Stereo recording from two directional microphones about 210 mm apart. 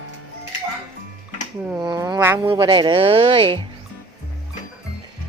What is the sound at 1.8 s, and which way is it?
Speech, 20° right (ahead or behind).